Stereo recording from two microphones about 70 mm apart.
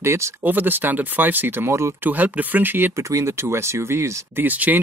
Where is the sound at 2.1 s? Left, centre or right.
Right.